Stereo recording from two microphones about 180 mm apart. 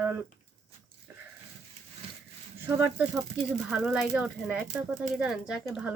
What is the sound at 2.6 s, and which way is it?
Speech, 10° right (ahead or behind).